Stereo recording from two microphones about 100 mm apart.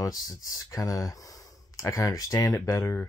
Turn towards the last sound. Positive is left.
turn(degrees=25)  # may be behind; listen again after turning